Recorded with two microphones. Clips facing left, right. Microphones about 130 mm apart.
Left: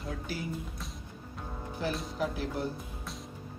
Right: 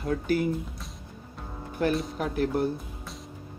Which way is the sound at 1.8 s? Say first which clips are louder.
Right 6 dB; 60° right (ahead or behind).